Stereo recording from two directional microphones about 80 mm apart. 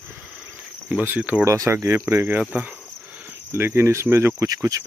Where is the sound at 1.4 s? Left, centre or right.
Right.